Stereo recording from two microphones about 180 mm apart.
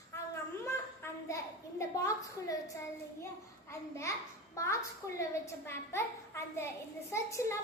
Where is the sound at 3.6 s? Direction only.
15° left (ahead or behind).